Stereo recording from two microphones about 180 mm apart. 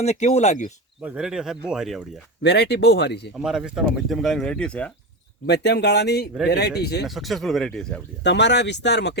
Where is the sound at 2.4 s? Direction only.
70° left (ahead or behind).